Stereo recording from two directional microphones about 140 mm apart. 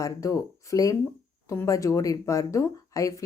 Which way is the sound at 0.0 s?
25° left (ahead or behind).